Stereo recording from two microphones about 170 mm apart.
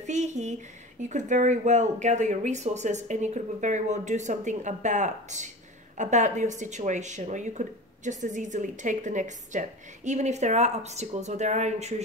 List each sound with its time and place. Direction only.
0.0 s speech: 45° right (ahead or behind)